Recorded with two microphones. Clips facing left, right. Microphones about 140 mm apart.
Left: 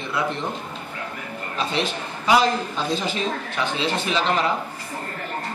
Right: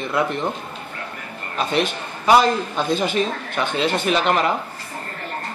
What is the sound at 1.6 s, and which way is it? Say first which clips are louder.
Speech: right 4 dB; 55° right (ahead or behind).